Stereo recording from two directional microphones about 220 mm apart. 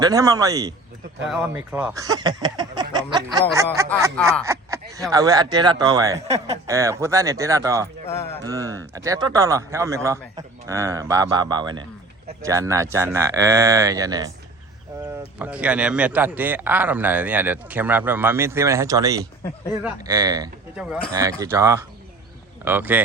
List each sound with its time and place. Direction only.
0.0 s a man's voice: 15° right (ahead or behind)
1.2 s a man's voice: 5° right (ahead or behind)
4.4 s a sound: 15° right (ahead or behind)
5.1 s a man's voice: 15° right (ahead or behind)
6.2 s speech: 30° right (ahead or behind)
6.7 s a man's voice: 15° right (ahead or behind)
8.0 s speech: 10° left (ahead or behind)
8.4 s a man's voice: 15° right (ahead or behind)
15.4 s a man's voice: 5° right (ahead or behind)
20.7 s speech: centre (ahead or behind)
21.1 s a man's voice: 15° right (ahead or behind)